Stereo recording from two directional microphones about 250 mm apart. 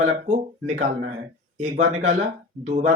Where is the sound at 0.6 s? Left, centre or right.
Right.